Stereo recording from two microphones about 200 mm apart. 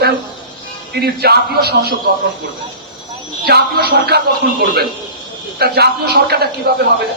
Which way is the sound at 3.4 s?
50° right (ahead or behind).